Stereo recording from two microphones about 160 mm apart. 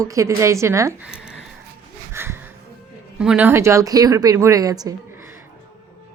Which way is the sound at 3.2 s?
5° right (ahead or behind).